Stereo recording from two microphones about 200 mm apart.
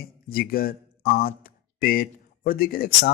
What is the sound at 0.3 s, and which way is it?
Speech, 50° left (ahead or behind).